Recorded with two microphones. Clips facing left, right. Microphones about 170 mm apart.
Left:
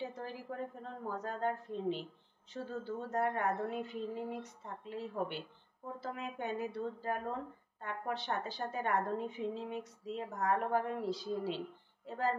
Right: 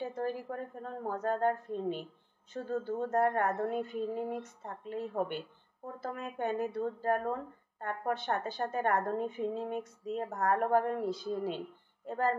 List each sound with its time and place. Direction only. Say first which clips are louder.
0.1 s a woman's voice: right 7 dB; 50° right (ahead or behind)